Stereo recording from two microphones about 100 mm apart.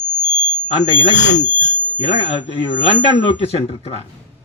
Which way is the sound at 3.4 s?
90° left.